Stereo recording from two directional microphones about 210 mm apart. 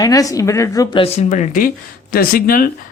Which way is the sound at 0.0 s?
15° left (ahead or behind).